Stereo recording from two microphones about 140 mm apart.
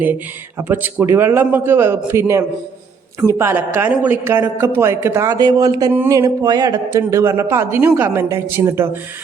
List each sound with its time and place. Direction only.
0.7 s speech: 15° right (ahead or behind)